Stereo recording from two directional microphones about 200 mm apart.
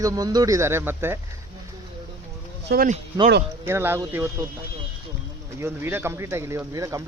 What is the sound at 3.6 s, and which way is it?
Speech, 10° right (ahead or behind).